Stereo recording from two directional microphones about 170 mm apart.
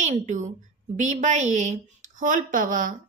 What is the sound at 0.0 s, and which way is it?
A woman's voice, 45° right (ahead or behind).